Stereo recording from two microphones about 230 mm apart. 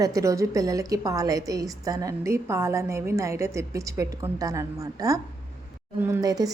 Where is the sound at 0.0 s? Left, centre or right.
Centre.